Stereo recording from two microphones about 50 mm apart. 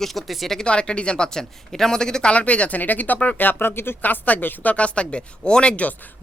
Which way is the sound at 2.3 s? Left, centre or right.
Left.